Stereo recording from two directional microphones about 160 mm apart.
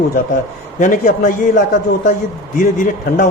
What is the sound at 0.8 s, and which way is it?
A man's voice, 60° left (ahead or behind).